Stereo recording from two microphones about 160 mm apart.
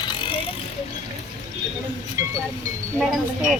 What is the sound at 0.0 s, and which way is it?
Vehicle, 30° left (ahead or behind).